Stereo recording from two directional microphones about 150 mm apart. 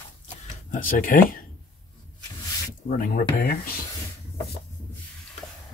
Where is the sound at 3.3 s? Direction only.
85° left.